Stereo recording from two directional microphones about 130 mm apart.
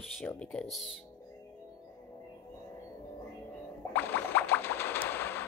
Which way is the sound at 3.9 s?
15° left (ahead or behind).